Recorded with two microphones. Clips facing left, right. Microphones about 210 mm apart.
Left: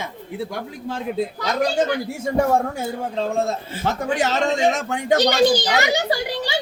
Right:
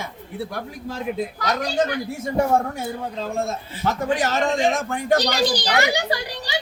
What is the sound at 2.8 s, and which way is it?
A woman's voice, 25° left (ahead or behind).